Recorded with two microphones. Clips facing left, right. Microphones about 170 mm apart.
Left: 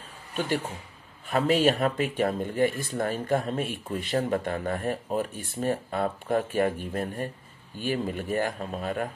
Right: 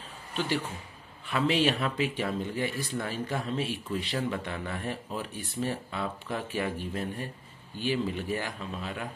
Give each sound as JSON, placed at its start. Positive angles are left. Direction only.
{"t": 0.4, "sound": "speech", "side_deg": 50}